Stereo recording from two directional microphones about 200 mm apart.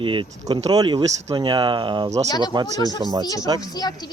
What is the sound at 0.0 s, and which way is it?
Speech, 25° right (ahead or behind).